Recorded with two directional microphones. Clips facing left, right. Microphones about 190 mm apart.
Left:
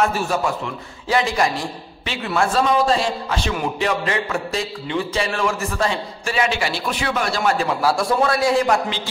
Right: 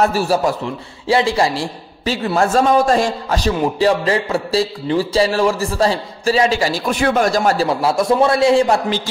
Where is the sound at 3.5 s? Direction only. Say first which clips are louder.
Right 8 dB; 30° right (ahead or behind).